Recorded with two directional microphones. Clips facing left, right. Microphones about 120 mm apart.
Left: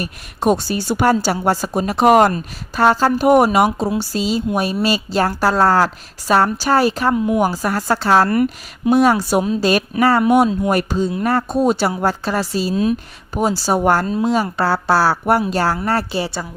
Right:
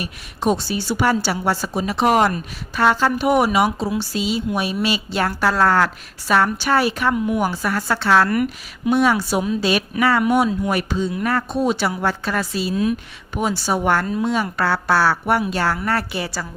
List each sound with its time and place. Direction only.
0.0 s a woman's voice: 50° left (ahead or behind); by 13.0 s 25° left (ahead or behind)
13.3 s a woman's voice: 35° left (ahead or behind)